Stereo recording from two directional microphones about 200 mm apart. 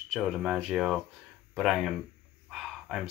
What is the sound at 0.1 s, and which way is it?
Speech, centre (ahead or behind).